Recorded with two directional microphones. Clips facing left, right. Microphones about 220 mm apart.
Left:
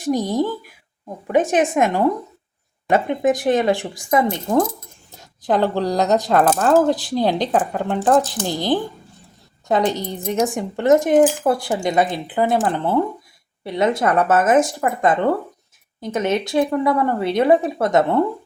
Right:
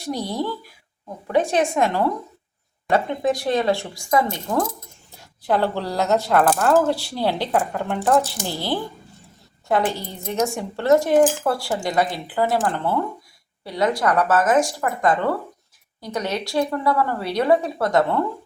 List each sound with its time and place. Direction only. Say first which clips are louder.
0.0 s speech: left 6 dB; 15° left (ahead or behind)